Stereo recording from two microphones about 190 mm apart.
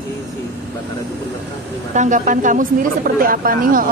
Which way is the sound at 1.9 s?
40° right (ahead or behind).